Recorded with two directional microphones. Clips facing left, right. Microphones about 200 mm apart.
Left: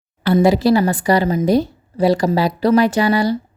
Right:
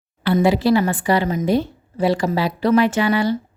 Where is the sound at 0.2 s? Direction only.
40° left (ahead or behind).